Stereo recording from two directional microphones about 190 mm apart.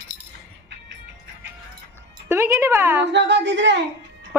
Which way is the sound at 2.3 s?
15° right (ahead or behind).